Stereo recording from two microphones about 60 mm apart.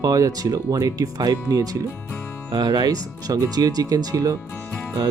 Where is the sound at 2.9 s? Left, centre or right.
Right.